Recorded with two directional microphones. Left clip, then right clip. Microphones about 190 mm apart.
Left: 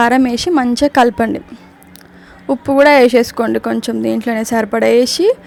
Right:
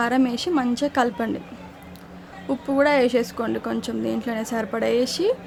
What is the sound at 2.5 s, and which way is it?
Speech, 40° left (ahead or behind).